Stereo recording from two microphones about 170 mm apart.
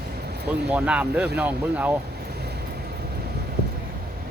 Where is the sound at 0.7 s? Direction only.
10° right (ahead or behind).